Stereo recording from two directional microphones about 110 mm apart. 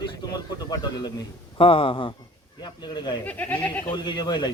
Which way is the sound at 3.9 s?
45° left (ahead or behind).